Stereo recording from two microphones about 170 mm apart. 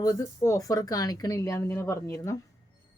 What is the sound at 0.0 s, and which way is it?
Speech, 20° left (ahead or behind).